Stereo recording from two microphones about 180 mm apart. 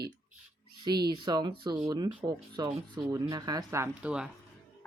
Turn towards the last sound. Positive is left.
turn(degrees=-5)  # may be behind; listen again after turning